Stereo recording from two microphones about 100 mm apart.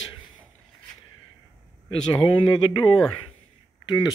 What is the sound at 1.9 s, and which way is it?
Speech, 60° left (ahead or behind).